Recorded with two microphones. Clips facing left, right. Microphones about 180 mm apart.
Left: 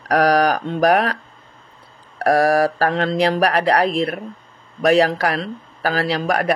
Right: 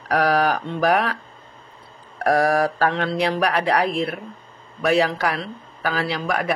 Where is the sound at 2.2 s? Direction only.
35° left (ahead or behind).